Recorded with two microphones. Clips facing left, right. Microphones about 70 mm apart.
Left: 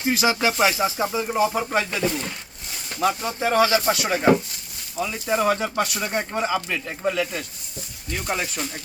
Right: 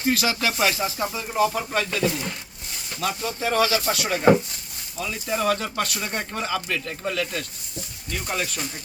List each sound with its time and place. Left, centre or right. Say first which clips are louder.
0.0 s speech: left 2 dB; centre
3.2 s speech: even; centre